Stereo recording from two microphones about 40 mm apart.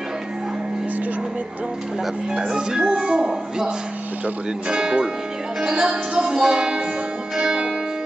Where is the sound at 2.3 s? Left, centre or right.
Centre.